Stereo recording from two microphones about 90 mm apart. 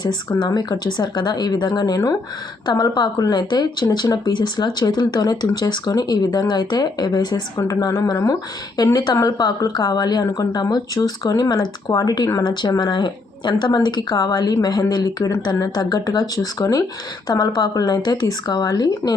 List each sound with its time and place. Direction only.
0.0 s speech: 55° left (ahead or behind)
7.6 s speech: 40° left (ahead or behind)